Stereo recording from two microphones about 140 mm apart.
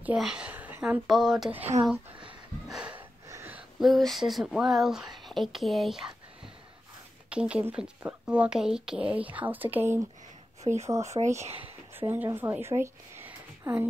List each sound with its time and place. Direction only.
0.0 s speech: 5° right (ahead or behind)
2.7 s snort: 10° right (ahead or behind)
3.3 s a sound: 15° right (ahead or behind)
3.8 s speech: centre (ahead or behind)
7.2 s speech: 10° right (ahead or behind)
10.6 s speech: 50° right (ahead or behind)
10.9 s speech: 20° right (ahead or behind)
11.1 s speech: 50° right (ahead or behind)
11.9 s a woman's voice: 15° right (ahead or behind)